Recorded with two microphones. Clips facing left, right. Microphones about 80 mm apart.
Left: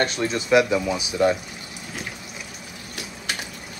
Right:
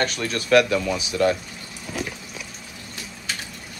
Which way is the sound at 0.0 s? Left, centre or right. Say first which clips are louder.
Left 2 dB; left.